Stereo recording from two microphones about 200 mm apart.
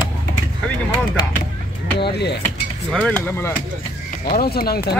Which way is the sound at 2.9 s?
5° left (ahead or behind).